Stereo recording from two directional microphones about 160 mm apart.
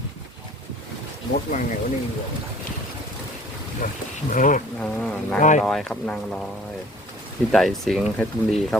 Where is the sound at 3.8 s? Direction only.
60° left (ahead or behind).